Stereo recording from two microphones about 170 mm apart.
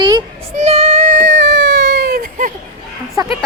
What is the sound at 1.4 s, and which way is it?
Baby cry, 90° right.